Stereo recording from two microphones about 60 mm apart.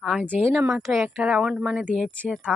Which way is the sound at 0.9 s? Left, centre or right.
Centre.